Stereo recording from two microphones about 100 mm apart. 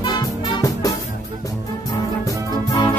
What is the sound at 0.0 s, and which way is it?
Music, 45° left (ahead or behind).